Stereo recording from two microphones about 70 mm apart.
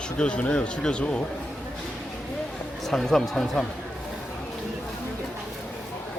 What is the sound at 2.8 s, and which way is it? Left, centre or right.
Speech, centre.